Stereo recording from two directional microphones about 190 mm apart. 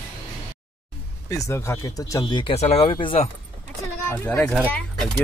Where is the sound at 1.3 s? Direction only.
15° left (ahead or behind).